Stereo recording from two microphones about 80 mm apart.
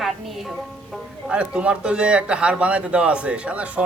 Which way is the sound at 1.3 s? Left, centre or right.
Centre.